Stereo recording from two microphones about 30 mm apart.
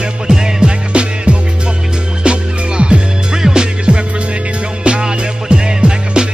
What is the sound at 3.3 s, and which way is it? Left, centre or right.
Music, right.